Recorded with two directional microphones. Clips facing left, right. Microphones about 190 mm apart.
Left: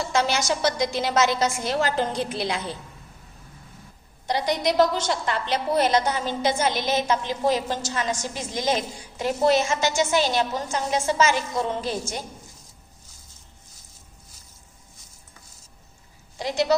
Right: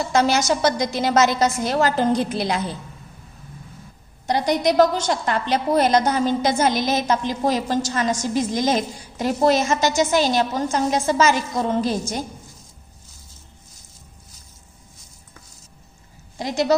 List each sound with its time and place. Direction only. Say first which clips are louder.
0.1 s a woman's voice: right 6 dB; 40° right (ahead or behind)
4.3 s a woman's voice: right 4 dB; 45° right (ahead or behind)
16.4 s a woman's voice: right 2 dB; 45° right (ahead or behind)